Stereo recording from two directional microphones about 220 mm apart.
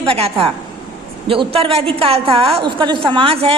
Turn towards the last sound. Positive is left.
turn(degrees=-25)  # may be behind; listen again after turning